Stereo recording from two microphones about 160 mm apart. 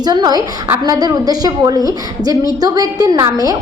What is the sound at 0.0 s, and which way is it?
A woman's voice, 25° right (ahead or behind).